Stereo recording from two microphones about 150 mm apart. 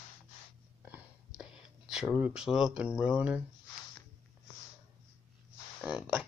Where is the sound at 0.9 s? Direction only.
5° right (ahead or behind).